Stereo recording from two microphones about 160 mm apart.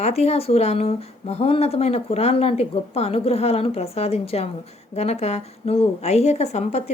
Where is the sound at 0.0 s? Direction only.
40° left (ahead or behind).